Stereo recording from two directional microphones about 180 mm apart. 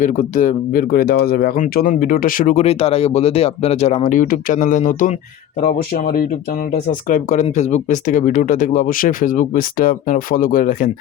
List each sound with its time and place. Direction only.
0.0 s speech: 45° left (ahead or behind)